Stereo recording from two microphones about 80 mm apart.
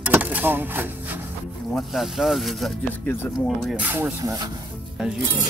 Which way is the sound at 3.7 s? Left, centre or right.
Centre.